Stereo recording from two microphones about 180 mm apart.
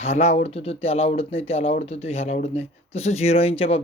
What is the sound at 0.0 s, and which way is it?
Speech, 40° left (ahead or behind).